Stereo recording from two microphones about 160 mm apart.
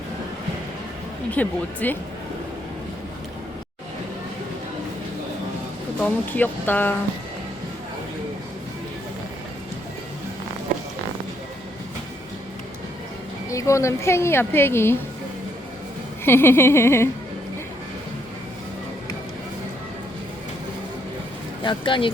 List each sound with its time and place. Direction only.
1.3 s a woman's voice: 10° left (ahead or behind)
6.0 s a woman's voice: 10° left (ahead or behind)
13.5 s a woman's voice: 20° left (ahead or behind)
16.2 s a woman's voice: 15° left (ahead or behind)
21.6 s speech: 30° left (ahead or behind)